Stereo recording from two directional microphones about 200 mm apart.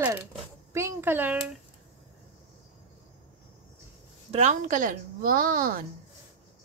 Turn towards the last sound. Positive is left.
turn(degrees=-45)  # may be behind; listen again after turning